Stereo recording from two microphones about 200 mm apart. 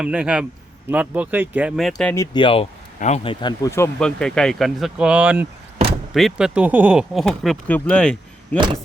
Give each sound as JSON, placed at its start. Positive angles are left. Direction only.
{"t": 0.0, "sound": "speech", "side_deg": -5}
{"t": 2.1, "sound": "speech", "side_deg": 20}
{"t": 3.4, "sound": "speech", "side_deg": 15}
{"t": 4.0, "sound": "speech", "side_deg": 5}
{"t": 8.5, "sound": "speech", "side_deg": -25}